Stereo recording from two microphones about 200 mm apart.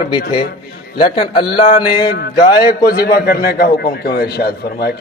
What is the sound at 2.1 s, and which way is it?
A man's voice, 50° left (ahead or behind).